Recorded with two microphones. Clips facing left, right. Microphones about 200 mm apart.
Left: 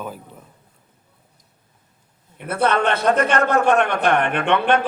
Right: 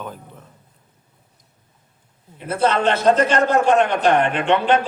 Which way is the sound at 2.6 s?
60° left (ahead or behind).